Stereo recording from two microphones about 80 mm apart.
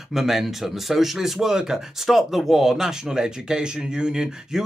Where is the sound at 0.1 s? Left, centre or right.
Centre.